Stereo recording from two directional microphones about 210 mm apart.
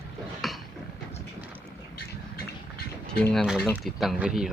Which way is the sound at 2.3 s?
50° left (ahead or behind).